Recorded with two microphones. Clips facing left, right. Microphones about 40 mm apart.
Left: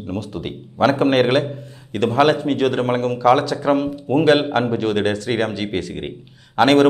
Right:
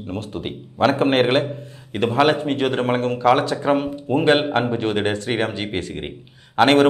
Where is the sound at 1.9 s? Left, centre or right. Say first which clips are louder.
Left 2 dB; centre.